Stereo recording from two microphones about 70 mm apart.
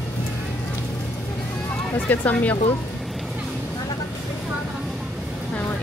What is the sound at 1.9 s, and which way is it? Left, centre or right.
Speech, left.